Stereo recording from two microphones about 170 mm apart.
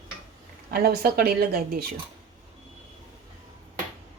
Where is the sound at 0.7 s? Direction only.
65° right (ahead or behind).